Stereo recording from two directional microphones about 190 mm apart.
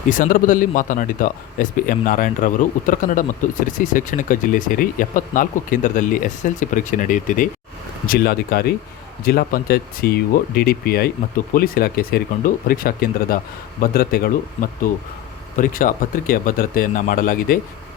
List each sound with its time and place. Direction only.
0.1 s speech: 45° left (ahead or behind)